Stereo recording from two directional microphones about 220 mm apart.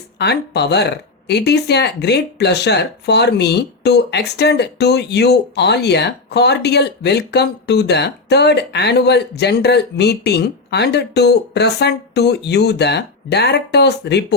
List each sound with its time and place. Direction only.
0.2 s speech: 50° left (ahead or behind)